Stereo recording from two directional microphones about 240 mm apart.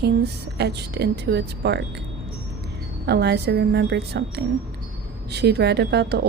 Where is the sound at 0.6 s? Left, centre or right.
Right.